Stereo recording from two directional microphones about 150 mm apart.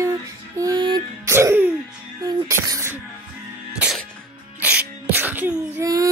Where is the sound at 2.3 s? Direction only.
25° right (ahead or behind).